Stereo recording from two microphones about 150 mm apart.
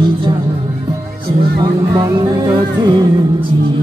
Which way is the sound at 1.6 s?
25° right (ahead or behind).